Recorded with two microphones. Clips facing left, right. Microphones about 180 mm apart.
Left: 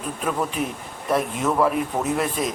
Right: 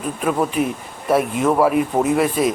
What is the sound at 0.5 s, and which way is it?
Speech, 5° right (ahead or behind).